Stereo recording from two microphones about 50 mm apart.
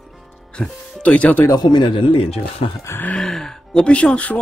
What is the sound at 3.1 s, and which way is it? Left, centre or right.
Speech, centre.